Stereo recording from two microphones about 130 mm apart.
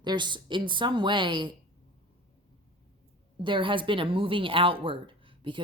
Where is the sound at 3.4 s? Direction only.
40° right (ahead or behind).